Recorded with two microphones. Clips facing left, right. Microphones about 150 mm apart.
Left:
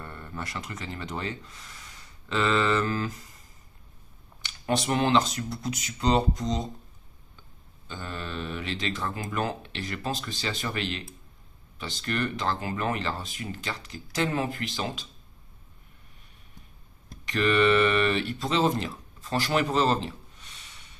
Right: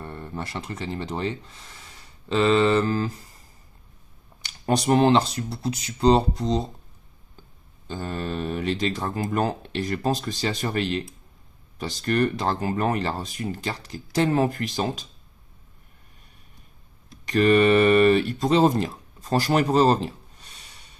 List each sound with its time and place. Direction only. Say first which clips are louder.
0.0 s speech: right 4 dB; 25° right (ahead or behind)
7.9 s speech: right 6 dB; 40° right (ahead or behind)
17.2 s speech: right 5 dB; 40° right (ahead or behind)
19.7 s a sound: right 6 dB; 40° right (ahead or behind)